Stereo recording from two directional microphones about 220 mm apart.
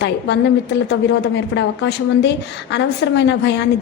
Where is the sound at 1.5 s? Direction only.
50° left (ahead or behind).